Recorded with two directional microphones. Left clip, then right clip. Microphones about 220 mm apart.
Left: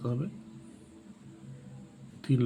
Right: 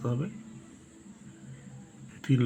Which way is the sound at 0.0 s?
20° right (ahead or behind).